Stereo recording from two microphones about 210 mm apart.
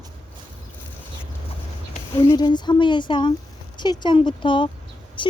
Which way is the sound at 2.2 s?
20° left (ahead or behind).